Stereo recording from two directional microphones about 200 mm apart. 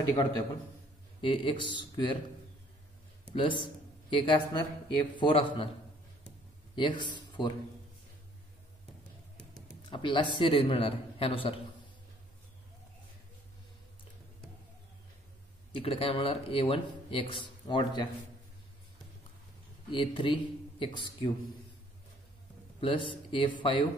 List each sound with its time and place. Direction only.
0.1 s speech: 20° left (ahead or behind)
3.3 s speech: 25° left (ahead or behind)
6.7 s a man's voice: 25° left (ahead or behind)
9.8 s speech: 25° left (ahead or behind)
15.7 s speech: 30° left (ahead or behind)
19.9 s speech: 25° left (ahead or behind)
22.8 s speech: 25° left (ahead or behind)